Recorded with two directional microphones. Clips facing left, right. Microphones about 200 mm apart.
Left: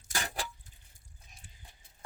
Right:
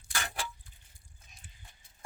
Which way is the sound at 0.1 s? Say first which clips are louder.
Left 1 dB; 40° left (ahead or behind).